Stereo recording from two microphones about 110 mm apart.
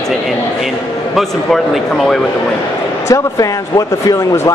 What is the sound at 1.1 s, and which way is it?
A man's voice, centre (ahead or behind).